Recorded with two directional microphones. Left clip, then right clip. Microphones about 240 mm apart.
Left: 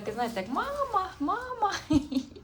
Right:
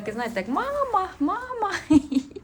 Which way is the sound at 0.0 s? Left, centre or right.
Centre.